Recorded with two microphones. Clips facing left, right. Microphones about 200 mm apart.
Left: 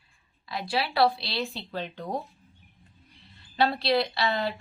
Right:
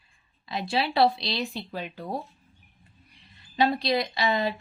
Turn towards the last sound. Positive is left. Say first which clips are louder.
# right 2 dB
turn(degrees=-15)  # may be behind; listen again after turning